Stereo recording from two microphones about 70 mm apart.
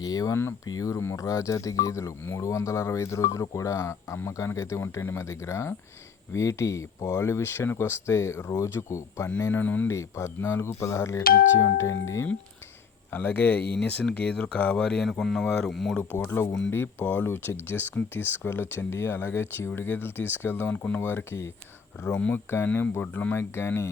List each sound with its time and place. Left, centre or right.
0.0 s speech: left
9.5 s speech: left
9.8 s speech: left
13.1 s speech: left; by 16.0 s centre
16.4 s speech: left
22.3 s speech: left